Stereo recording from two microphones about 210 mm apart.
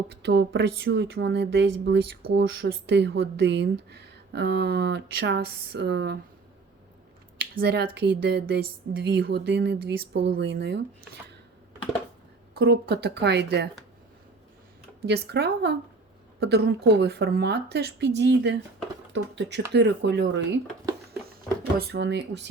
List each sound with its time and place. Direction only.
0.3 s speech: 55° right (ahead or behind)
7.5 s speech: 50° right (ahead or behind)
12.5 s speech: 50° right (ahead or behind)
15.0 s speech: 50° right (ahead or behind)
21.8 s speech: 55° right (ahead or behind)